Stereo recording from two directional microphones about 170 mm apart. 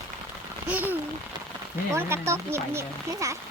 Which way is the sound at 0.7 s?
10° right (ahead or behind).